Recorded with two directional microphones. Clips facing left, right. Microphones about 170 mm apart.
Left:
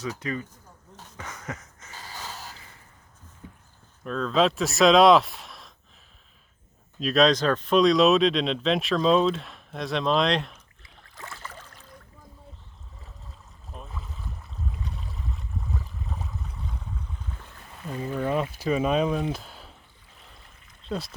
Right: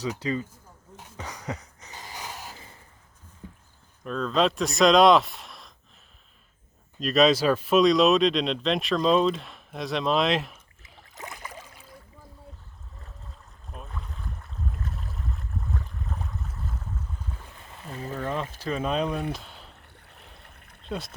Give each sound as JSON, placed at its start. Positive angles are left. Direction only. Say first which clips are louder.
{"t": 0.1, "sound": "speech", "louder": "right 3 dB", "side_deg": -20}
{"t": 1.2, "sound": "a sound", "louder": "right 2 dB", "side_deg": -15}
{"t": 4.0, "sound": "speech", "louder": "left 1 dB", "side_deg": 0}
{"t": 7.0, "sound": "speech", "louder": "even", "side_deg": 0}
{"t": 11.1, "sound": "boat", "louder": "right 1 dB", "side_deg": -20}
{"t": 13.7, "sound": "boat", "louder": "even", "side_deg": 0}
{"t": 18.1, "sound": "speech", "louder": "left 4 dB", "side_deg": 10}
{"t": 19.3, "sound": "a sound", "louder": "left 2 dB", "side_deg": 0}
{"t": 20.3, "sound": "a sound", "louder": "right 2 dB", "side_deg": -60}
{"t": 20.8, "sound": "speech", "louder": "left 2 dB", "side_deg": 0}